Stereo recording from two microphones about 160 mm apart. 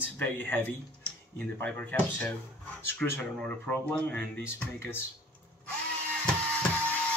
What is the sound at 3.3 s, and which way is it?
Speech, 5° left (ahead or behind).